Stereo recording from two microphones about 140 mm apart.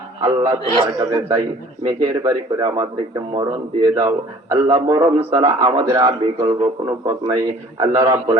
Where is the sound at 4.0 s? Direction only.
25° right (ahead or behind).